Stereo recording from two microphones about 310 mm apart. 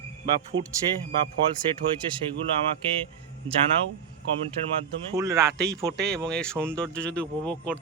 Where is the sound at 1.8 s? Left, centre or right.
Right.